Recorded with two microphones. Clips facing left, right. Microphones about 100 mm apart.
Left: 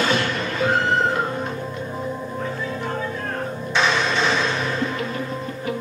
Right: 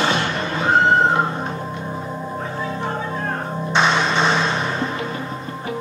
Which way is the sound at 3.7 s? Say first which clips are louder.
Right 3 dB; 30° right (ahead or behind).